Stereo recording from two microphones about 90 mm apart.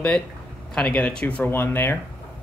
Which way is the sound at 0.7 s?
10° left (ahead or behind).